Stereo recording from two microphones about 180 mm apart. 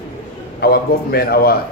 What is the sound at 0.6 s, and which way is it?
Speech, 60° left (ahead or behind).